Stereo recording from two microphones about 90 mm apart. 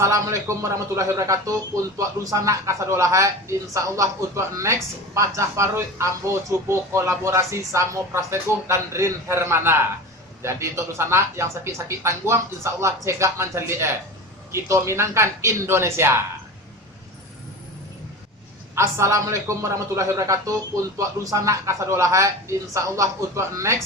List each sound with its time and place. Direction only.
0.0 s speech: 30° right (ahead or behind)
18.7 s speech: 30° right (ahead or behind)